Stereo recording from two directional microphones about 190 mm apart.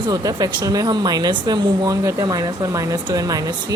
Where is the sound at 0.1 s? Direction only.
20° right (ahead or behind).